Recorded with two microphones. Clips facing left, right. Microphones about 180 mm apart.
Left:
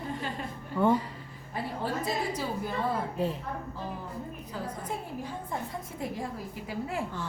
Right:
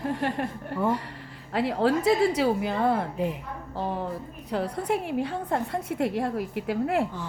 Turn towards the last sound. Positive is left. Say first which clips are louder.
# right 9 dB
turn(degrees=-65)  # may be behind; listen again after turning